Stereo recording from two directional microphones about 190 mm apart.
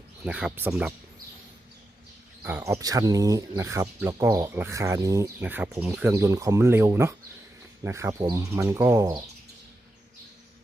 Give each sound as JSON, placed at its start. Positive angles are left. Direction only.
{"t": 0.3, "sound": "speech", "side_deg": -5}
{"t": 2.4, "sound": "speech", "side_deg": -10}